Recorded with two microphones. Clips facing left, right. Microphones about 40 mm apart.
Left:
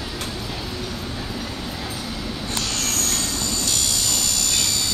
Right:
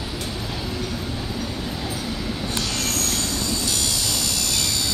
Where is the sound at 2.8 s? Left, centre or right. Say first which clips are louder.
Even; centre.